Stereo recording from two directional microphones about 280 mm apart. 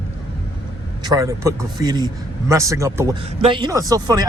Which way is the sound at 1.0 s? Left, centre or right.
Centre.